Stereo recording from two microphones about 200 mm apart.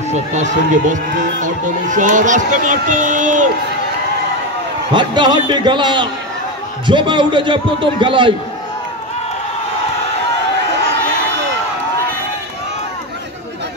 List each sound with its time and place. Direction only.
0.1 s speech: 35° right (ahead or behind)
4.9 s a man's voice: 20° right (ahead or behind)